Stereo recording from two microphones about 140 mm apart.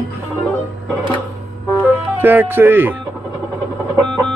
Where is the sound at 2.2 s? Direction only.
15° right (ahead or behind).